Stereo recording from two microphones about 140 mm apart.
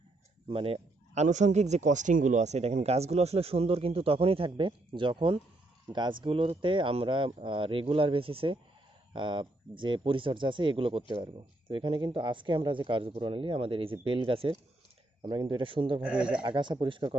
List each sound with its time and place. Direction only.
0.4 s speech: 45° right (ahead or behind)
16.0 s speech: 5° right (ahead or behind)
16.4 s speech: 35° right (ahead or behind)